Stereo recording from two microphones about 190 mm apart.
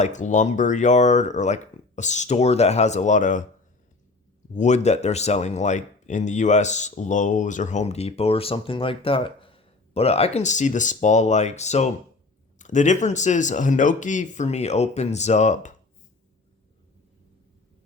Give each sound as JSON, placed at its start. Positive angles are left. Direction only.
{"t": 0.0, "sound": "speech", "side_deg": 40}
{"t": 4.5, "sound": "speech", "side_deg": 40}